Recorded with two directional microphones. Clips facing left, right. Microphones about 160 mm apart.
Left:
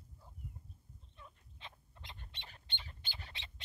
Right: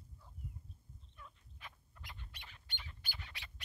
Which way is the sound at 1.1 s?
25° left (ahead or behind).